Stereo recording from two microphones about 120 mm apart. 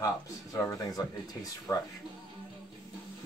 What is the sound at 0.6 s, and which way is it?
Speech, 30° left (ahead or behind).